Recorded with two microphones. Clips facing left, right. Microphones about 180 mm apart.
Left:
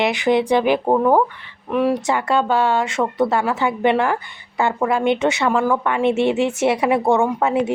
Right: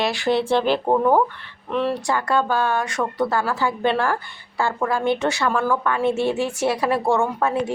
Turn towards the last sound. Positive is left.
turn(degrees=20)  # may be behind; listen again after turning